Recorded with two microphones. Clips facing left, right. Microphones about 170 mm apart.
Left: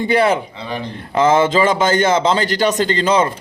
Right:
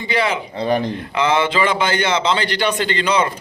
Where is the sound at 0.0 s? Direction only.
50° left (ahead or behind).